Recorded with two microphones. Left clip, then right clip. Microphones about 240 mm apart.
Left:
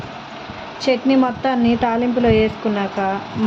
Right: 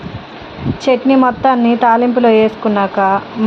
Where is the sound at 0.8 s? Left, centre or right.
Centre.